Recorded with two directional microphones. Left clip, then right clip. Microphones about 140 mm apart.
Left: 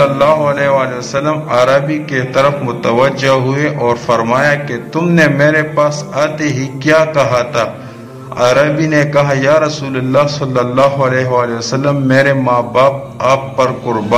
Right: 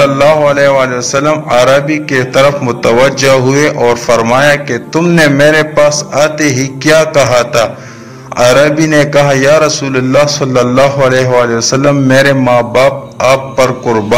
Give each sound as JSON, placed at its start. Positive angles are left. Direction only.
{"t": 0.0, "sound": "a man's voice", "side_deg": -40}